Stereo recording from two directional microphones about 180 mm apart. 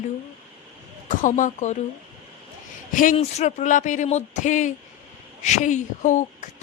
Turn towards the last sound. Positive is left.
turn(degrees=40)  # may be behind; listen again after turning